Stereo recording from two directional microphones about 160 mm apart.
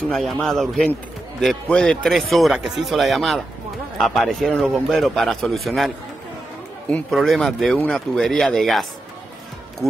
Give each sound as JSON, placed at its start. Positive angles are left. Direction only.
{"t": 0.1, "sound": "speech", "side_deg": 0}
{"t": 6.9, "sound": "speech", "side_deg": 0}